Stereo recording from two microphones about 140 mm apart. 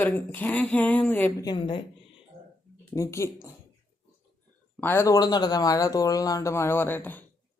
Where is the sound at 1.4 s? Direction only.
35° left (ahead or behind).